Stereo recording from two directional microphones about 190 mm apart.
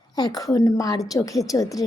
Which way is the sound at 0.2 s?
20° left (ahead or behind).